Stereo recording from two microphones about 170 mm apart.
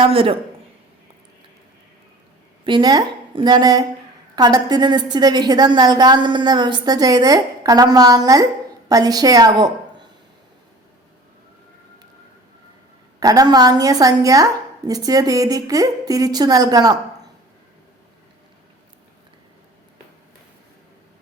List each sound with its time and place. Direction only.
0.0 s speech: 35° right (ahead or behind)
2.6 s a woman's voice: 25° right (ahead or behind)
13.1 s a woman's voice: 20° right (ahead or behind)